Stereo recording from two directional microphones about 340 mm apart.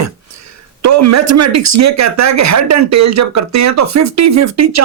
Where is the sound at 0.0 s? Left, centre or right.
Right.